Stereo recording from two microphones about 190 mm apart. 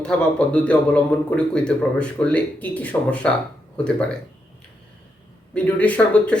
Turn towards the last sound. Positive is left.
turn(degrees=5)  # may be behind; listen again after turning